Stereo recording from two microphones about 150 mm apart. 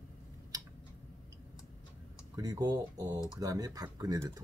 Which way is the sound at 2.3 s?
20° right (ahead or behind).